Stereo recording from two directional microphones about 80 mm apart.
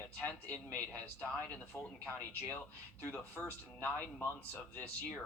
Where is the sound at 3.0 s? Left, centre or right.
Left.